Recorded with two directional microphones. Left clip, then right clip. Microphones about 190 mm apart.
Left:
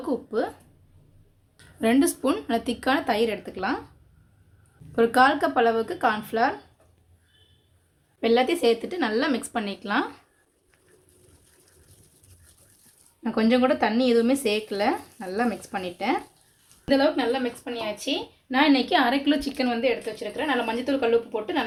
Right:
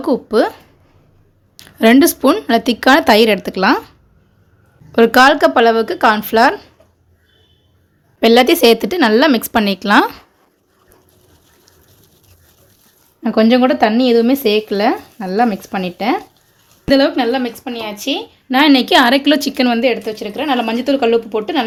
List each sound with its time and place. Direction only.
0.0 s speech: 40° right (ahead or behind)
1.5 s speech: 45° right (ahead or behind)
4.9 s speech: 45° right (ahead or behind)
8.2 s speech: 55° right (ahead or behind)
13.2 s speech: 35° right (ahead or behind)
16.9 s speech: 55° right (ahead or behind)